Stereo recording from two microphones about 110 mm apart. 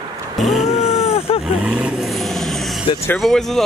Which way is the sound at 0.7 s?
75° left (ahead or behind).